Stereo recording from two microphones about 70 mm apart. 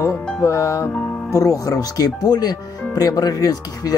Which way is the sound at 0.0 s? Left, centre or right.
Left.